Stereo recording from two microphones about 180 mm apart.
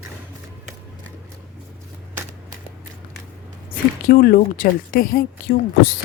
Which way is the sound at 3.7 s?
55° left (ahead or behind).